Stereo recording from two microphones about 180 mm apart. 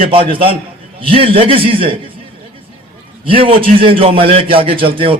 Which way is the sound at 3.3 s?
30° right (ahead or behind).